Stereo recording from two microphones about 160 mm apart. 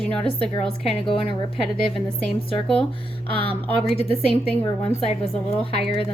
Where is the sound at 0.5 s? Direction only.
35° left (ahead or behind).